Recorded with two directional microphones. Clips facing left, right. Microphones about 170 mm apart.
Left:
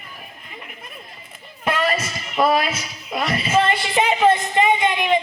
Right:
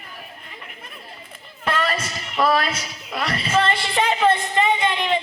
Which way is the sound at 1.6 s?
10° left (ahead or behind).